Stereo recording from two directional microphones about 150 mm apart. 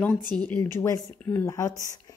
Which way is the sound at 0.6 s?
20° left (ahead or behind).